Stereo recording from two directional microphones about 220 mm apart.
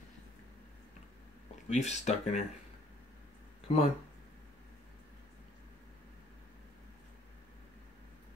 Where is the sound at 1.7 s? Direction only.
30° left (ahead or behind).